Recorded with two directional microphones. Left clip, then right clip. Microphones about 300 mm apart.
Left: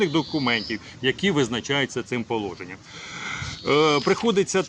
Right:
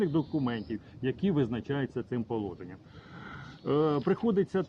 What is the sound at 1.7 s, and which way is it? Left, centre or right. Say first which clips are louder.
Speech: left 9 dB; centre.